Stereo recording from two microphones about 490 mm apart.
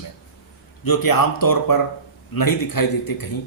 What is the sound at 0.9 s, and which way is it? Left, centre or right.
Speech, left.